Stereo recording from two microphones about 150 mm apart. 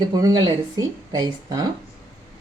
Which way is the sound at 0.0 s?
25° right (ahead or behind).